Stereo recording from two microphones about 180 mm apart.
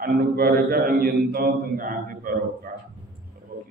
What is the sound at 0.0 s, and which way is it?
A man's voice, 55° right (ahead or behind).